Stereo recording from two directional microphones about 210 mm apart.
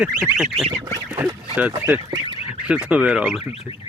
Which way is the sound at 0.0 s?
5° right (ahead or behind).